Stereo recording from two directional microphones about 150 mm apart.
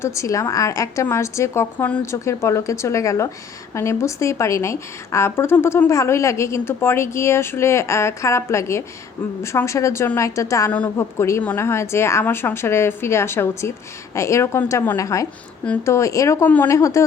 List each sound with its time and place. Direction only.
0.0 s a woman's voice: 20° left (ahead or behind)